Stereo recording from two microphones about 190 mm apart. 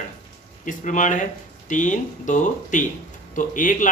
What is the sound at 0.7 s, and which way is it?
Speech, 40° left (ahead or behind).